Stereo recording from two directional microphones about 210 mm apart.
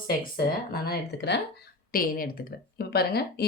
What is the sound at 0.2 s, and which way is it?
Speech, 45° left (ahead or behind).